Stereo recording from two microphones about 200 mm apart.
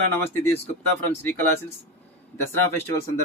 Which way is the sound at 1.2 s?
10° left (ahead or behind).